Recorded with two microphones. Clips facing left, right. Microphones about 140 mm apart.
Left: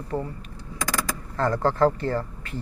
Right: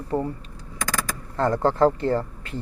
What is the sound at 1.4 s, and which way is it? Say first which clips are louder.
Speech: right 2 dB; 25° right (ahead or behind).